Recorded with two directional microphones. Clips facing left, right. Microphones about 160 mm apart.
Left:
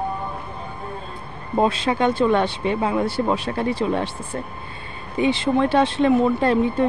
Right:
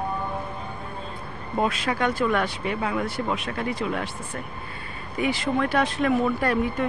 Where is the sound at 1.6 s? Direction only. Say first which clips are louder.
Left 5 dB; 30° left (ahead or behind).